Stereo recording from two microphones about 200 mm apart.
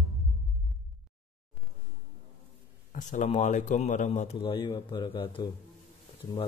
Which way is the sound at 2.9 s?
40° left (ahead or behind).